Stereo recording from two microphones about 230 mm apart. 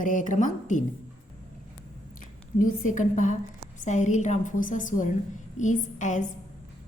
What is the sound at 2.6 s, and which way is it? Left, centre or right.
A woman's voice, left.